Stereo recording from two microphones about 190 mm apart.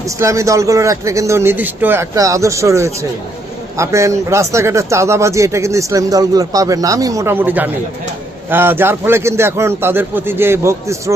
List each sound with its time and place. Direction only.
0.2 s speech: 15° right (ahead or behind)